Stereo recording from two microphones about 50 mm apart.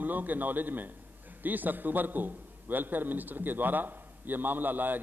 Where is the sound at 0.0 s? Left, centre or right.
Right.